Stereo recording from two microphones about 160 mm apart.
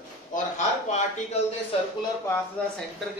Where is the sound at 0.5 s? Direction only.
45° left (ahead or behind).